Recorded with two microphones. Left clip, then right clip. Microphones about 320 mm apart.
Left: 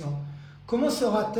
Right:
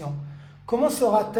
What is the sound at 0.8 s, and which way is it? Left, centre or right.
Speech, right.